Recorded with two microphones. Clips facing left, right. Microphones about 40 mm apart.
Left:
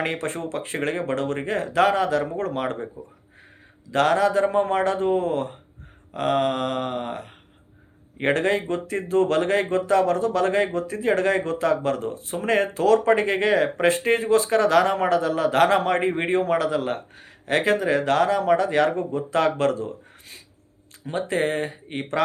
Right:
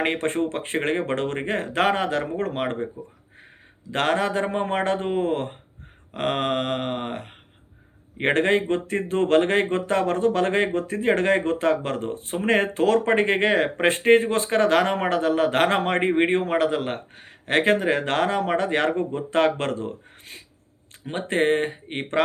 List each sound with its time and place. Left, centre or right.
0.0 s speech: right
3.9 s speech: right